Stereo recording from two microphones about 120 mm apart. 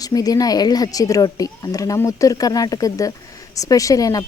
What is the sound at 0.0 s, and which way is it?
A woman's voice, 30° left (ahead or behind).